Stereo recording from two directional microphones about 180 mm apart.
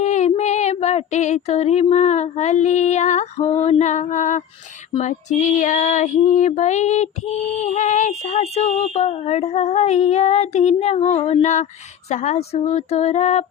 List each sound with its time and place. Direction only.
0.0 s female singing: 40° left (ahead or behind)
7.6 s speech: 40° left (ahead or behind)